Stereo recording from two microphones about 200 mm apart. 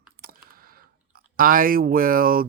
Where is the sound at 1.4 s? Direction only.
45° right (ahead or behind).